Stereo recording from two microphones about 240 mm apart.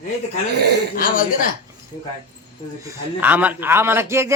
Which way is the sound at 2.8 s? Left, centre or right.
Centre.